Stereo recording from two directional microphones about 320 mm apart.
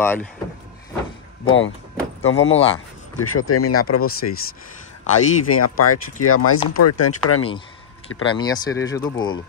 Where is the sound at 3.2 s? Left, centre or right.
Left.